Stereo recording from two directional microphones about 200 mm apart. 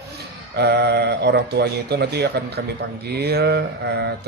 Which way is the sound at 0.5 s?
55° right (ahead or behind).